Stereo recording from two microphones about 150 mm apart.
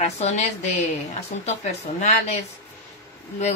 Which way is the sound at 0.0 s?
50° left (ahead or behind).